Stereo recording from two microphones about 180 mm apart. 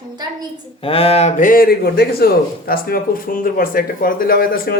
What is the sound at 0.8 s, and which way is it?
A man's voice, 30° left (ahead or behind).